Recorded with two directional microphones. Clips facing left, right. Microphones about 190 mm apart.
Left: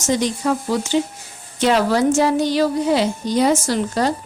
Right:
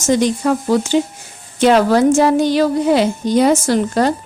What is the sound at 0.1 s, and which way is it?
A woman's voice, 50° right (ahead or behind).